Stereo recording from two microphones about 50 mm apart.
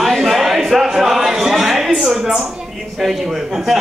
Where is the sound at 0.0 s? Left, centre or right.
Centre.